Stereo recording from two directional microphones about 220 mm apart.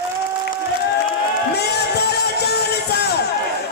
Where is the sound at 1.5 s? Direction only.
50° left (ahead or behind).